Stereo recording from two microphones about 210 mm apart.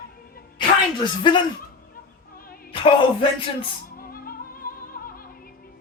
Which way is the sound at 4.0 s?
45° left (ahead or behind).